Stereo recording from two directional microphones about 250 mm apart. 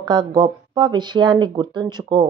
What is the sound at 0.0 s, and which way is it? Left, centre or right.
Speech, centre.